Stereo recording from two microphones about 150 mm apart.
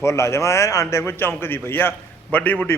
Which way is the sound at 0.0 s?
20° left (ahead or behind).